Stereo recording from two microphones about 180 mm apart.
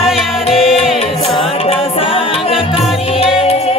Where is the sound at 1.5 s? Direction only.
30° left (ahead or behind).